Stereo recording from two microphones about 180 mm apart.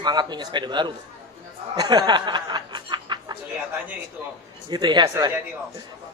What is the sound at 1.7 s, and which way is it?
Snicker, 25° right (ahead or behind).